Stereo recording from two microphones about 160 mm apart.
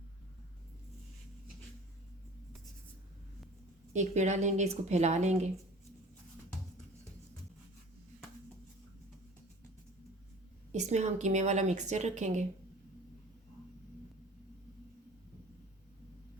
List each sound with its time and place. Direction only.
3.9 s a woman's voice: 45° right (ahead or behind)
10.7 s a woman's voice: 45° right (ahead or behind)